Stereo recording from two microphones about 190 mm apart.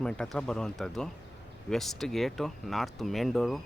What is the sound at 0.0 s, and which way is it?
Speech, 5° left (ahead or behind).